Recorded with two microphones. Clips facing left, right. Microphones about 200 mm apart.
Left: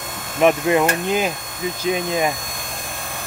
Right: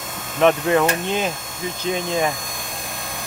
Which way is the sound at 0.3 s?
10° left (ahead or behind).